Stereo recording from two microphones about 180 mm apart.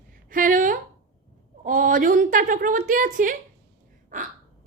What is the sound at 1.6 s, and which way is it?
A woman's voice, 45° right (ahead or behind).